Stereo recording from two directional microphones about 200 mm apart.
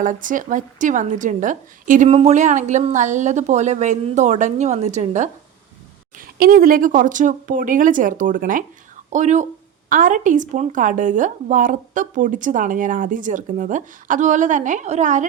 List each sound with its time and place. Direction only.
0.0 s a woman's voice: 40° right (ahead or behind)